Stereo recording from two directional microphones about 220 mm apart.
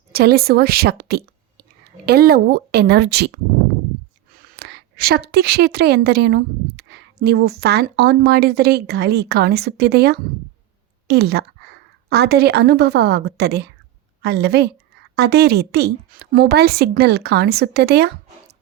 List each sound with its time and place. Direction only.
0.1 s a woman's voice: 45° right (ahead or behind)
4.4 s a woman's voice: 45° right (ahead or behind)